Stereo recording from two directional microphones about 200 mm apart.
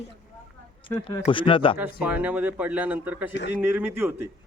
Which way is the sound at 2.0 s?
10° right (ahead or behind).